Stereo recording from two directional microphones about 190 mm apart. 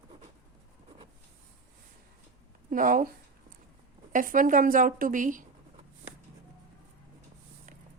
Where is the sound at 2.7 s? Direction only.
45° right (ahead or behind).